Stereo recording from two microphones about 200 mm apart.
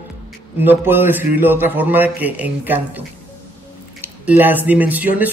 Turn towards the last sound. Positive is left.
turn(degrees=-10)  # may be behind; listen again after turning